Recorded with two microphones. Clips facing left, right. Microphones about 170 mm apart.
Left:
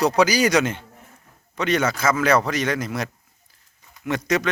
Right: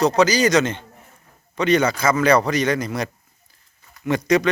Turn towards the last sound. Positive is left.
turn(degrees=0)  # may be behind; listen again after turning